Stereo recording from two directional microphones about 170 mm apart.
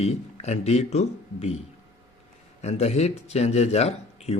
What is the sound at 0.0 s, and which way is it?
Speech, 40° left (ahead or behind).